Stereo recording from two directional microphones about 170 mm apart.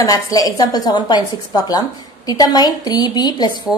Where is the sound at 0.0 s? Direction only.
20° left (ahead or behind).